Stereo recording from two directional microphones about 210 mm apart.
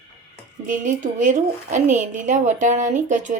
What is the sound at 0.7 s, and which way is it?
A woman's voice, 35° right (ahead or behind).